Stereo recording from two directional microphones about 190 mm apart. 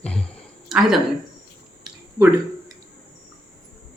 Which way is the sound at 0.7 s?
Centre (ahead or behind).